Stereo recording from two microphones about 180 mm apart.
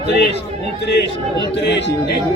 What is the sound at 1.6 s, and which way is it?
Speech, 75° left (ahead or behind).